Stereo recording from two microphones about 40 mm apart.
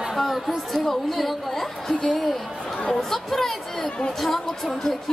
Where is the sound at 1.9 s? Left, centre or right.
Left.